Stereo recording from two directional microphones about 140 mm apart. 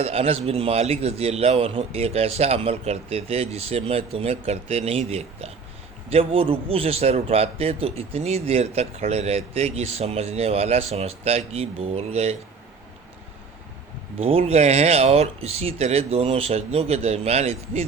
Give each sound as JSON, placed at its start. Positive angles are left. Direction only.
{"t": 0.0, "sound": "a man's voice", "side_deg": -45}
{"t": 14.2, "sound": "a man's voice", "side_deg": -45}